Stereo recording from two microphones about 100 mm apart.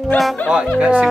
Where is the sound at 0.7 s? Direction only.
10° right (ahead or behind).